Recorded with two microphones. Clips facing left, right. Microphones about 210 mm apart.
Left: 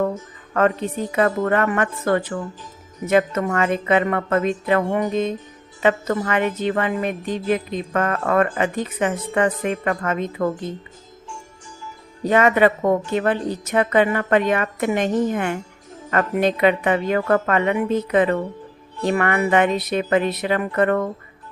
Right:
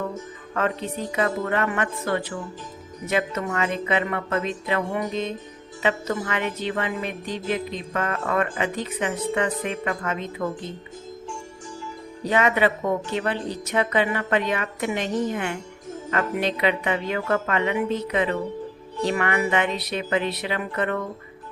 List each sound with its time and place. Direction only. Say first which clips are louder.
0.5 s speech: left 6 dB; 50° left (ahead or behind)
12.2 s speech: left 5 dB; 50° left (ahead or behind)